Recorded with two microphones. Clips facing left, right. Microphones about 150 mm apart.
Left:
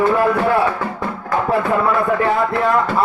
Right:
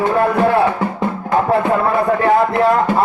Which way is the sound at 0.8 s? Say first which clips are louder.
Right 4 dB; 20° right (ahead or behind).